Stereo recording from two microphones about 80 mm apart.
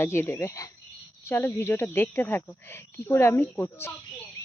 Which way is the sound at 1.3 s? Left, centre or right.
Left.